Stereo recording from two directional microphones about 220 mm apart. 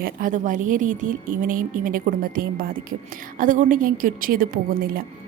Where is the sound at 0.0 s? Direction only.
40° right (ahead or behind).